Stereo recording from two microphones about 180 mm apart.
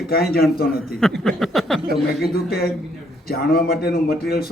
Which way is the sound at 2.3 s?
55° left (ahead or behind).